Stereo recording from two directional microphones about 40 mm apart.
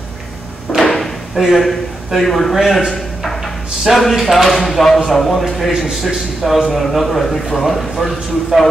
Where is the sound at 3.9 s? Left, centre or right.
Centre.